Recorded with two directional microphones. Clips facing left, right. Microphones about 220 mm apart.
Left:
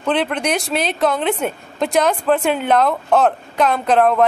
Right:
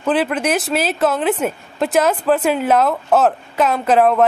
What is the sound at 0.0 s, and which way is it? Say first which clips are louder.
A woman's voice: right 2 dB; 5° right (ahead or behind).